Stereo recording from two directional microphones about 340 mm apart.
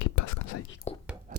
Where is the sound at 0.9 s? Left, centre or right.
Centre.